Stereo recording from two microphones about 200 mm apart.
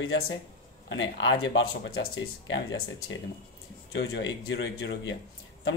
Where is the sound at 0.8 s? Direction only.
65° left (ahead or behind).